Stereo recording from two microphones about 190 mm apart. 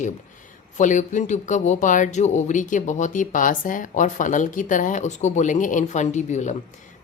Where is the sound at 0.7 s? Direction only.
40° left (ahead or behind).